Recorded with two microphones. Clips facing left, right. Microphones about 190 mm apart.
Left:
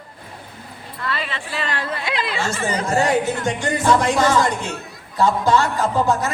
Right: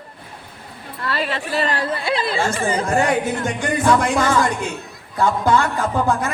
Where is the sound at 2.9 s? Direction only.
50° right (ahead or behind).